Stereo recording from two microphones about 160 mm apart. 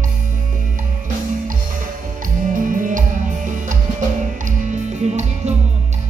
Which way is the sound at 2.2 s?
55° right (ahead or behind).